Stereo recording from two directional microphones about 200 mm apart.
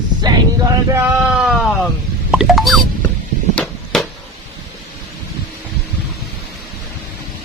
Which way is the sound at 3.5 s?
Centre (ahead or behind).